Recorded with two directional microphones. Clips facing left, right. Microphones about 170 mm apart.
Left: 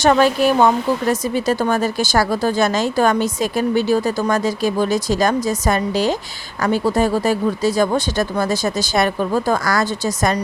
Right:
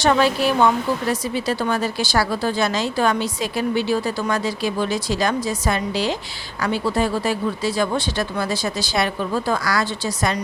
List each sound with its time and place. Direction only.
0.0 s speech: 45° left (ahead or behind)